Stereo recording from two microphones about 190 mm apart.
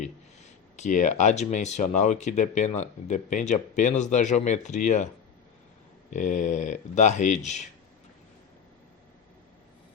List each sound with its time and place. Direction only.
0.8 s speech: 40° left (ahead or behind)
6.1 s speech: 40° left (ahead or behind)